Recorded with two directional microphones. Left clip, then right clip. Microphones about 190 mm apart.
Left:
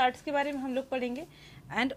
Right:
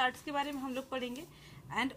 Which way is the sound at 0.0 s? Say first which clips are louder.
Left 6 dB; 25° left (ahead or behind).